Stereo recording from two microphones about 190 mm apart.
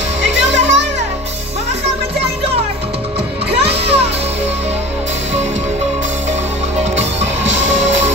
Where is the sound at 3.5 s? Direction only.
30° right (ahead or behind).